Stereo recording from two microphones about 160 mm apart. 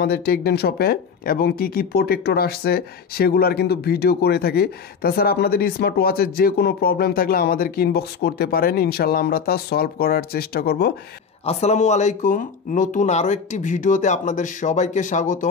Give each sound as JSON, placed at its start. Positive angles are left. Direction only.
{"t": 0.0, "sound": "speech", "side_deg": 75}
{"t": 11.4, "sound": "speech", "side_deg": 45}